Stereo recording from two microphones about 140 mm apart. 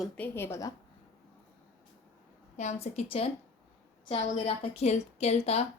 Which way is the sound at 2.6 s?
55° left (ahead or behind).